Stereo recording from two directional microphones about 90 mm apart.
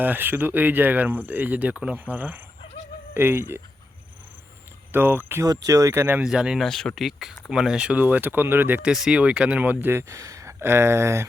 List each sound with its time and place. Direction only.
0.0 s speech: 20° right (ahead or behind)
4.9 s speech: 25° right (ahead or behind)
5.5 s speech: 40° right (ahead or behind)
6.2 s speech: 10° right (ahead or behind)
6.7 s speech: 5° left (ahead or behind); by 8.8 s 20° right (ahead or behind)
8.8 s speech: 10° right (ahead or behind); by 11.3 s 30° right (ahead or behind)